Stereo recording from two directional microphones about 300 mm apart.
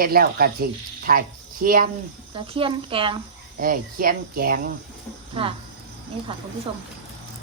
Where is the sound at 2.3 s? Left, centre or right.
Centre.